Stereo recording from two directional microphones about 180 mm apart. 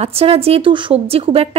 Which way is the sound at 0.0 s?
35° right (ahead or behind).